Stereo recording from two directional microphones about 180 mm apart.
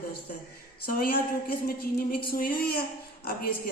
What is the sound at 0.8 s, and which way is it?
A woman's voice, 55° left (ahead or behind).